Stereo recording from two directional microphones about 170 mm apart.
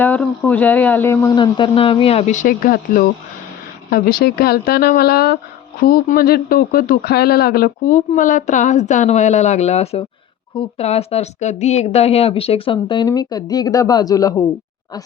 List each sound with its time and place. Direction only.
0.0 s speech: 10° left (ahead or behind)
1.4 s a woman's voice: 30° left (ahead or behind)